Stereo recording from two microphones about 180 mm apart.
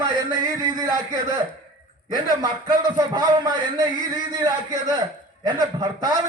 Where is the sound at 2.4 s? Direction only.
25° right (ahead or behind).